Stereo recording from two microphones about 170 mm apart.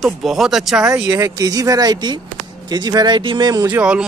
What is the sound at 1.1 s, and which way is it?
Speech, 20° right (ahead or behind).